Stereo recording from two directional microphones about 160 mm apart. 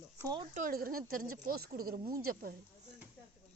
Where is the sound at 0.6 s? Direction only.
60° right (ahead or behind).